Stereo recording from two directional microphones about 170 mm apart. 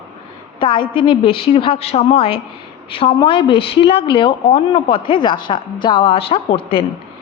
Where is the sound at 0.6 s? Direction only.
30° left (ahead or behind).